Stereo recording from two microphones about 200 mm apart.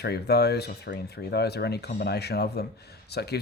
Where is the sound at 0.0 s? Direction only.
55° left (ahead or behind).